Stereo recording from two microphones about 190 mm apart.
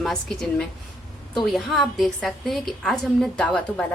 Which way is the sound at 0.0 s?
Centre (ahead or behind).